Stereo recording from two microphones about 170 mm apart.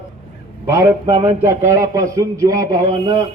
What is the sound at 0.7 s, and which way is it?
A man's voice, 20° right (ahead or behind).